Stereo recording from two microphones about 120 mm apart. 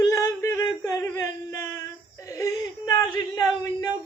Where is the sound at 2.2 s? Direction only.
25° left (ahead or behind).